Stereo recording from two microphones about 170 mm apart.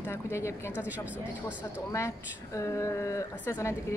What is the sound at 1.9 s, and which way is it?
A woman's voice, 15° left (ahead or behind).